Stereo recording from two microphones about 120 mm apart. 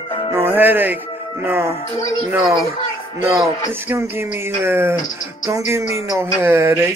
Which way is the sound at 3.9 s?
20° right (ahead or behind).